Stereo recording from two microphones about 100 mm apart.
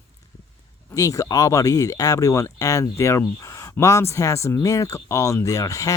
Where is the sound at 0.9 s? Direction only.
35° left (ahead or behind).